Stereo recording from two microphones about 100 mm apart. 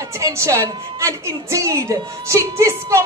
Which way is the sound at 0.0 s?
30° right (ahead or behind).